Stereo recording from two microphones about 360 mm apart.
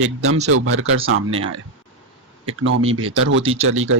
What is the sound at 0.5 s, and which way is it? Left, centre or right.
Speech, right.